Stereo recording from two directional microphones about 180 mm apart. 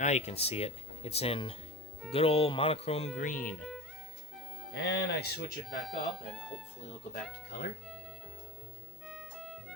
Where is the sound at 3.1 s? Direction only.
45° left (ahead or behind).